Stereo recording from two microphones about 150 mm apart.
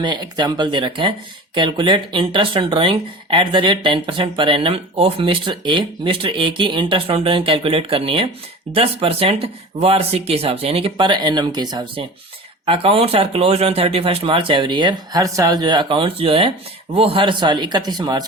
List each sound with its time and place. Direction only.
0.0 s speech: 30° right (ahead or behind)